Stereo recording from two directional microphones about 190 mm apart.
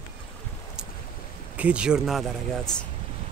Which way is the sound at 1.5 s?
5° right (ahead or behind).